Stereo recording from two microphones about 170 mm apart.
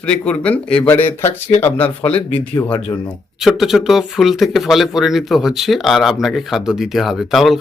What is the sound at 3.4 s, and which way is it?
Speech, centre (ahead or behind).